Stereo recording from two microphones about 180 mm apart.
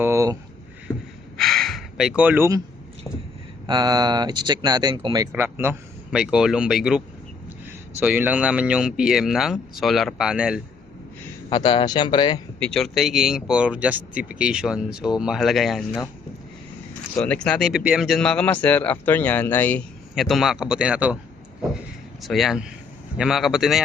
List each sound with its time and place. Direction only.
0.0 s a sound: 15° right (ahead or behind)
0.9 s a sound: 15° left (ahead or behind)
1.4 s gasp: centre (ahead or behind)
3.7 s speech: 20° right (ahead or behind); by 10.6 s 5° right (ahead or behind)
11.4 s speech: 25° left (ahead or behind)
12.5 s speech: 5° left (ahead or behind)
17.2 s speech: 5° left (ahead or behind)
20.1 s speech: centre (ahead or behind)
22.2 s speech: centre (ahead or behind)